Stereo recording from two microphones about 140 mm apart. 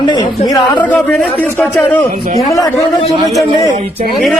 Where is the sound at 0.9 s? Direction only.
10° left (ahead or behind).